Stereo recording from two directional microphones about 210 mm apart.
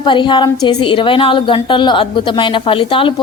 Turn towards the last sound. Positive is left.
turn(degrees=25)  # may be behind; listen again after turning